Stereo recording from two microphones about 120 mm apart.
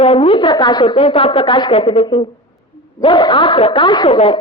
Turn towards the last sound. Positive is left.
turn(degrees=50)  # may be behind; listen again after turning